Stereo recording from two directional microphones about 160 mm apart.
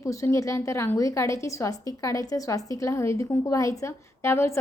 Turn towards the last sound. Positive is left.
turn(degrees=15)  # may be behind; listen again after turning